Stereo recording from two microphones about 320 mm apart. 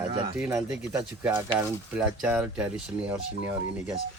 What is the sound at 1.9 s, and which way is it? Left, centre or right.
Speech, centre.